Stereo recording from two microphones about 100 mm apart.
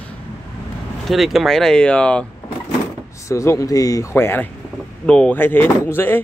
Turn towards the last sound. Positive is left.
turn(degrees=20)  # may be behind; listen again after turning